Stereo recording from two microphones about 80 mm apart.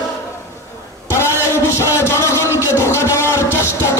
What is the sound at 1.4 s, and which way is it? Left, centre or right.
Music, left.